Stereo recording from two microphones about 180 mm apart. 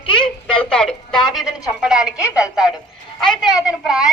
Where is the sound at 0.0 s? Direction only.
30° left (ahead or behind).